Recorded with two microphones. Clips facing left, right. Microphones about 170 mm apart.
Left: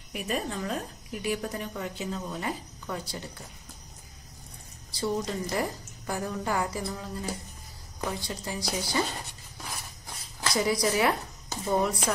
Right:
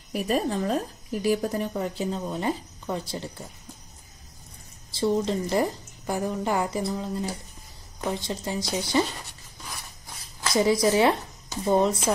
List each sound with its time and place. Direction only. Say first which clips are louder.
0.1 s speech: right 6 dB; 35° right (ahead or behind)
4.9 s a woman's voice: right 6 dB; 25° right (ahead or behind)
10.5 s a woman's voice: right 6 dB; 25° right (ahead or behind)